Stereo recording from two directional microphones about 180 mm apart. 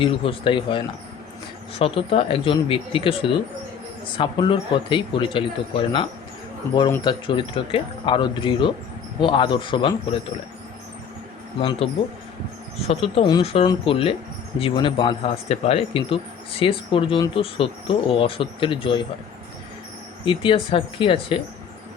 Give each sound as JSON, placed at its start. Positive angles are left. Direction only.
{"t": 0.0, "sound": "speech", "side_deg": 30}
{"t": 11.6, "sound": "speech", "side_deg": 30}
{"t": 12.9, "sound": "speech", "side_deg": 30}
{"t": 20.2, "sound": "speech", "side_deg": 30}